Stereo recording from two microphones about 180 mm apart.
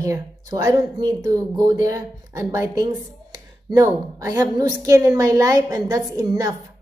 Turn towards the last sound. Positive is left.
turn(degrees=-20)  # may be behind; listen again after turning